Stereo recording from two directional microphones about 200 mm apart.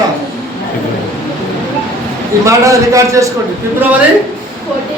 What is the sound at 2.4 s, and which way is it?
Speech, 15° right (ahead or behind).